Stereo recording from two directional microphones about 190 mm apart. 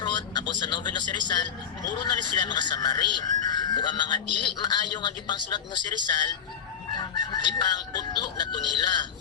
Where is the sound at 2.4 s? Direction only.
25° left (ahead or behind).